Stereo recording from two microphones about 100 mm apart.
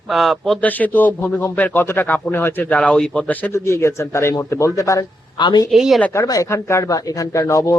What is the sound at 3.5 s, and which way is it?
A man's voice, 30° left (ahead or behind).